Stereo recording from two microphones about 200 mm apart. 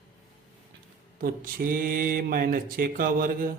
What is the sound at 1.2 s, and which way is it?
Speech, 45° right (ahead or behind).